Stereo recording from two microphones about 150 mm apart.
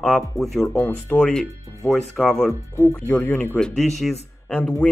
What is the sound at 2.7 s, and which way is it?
Speech, 15° left (ahead or behind).